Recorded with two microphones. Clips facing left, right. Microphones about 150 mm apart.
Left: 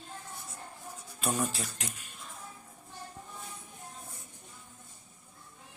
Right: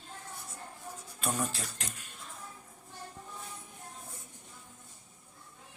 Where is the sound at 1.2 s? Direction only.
5° left (ahead or behind).